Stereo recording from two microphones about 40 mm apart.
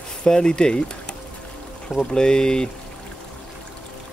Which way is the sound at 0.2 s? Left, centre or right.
Centre.